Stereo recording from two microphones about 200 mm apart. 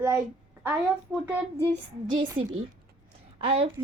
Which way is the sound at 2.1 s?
25° right (ahead or behind).